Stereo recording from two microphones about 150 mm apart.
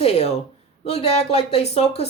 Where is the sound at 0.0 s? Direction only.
45° left (ahead or behind).